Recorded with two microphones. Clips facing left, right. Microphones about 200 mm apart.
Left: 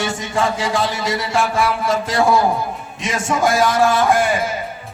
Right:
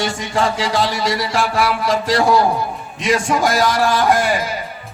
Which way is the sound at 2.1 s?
40° right (ahead or behind).